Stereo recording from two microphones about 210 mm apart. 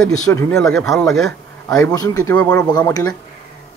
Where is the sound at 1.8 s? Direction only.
15° left (ahead or behind).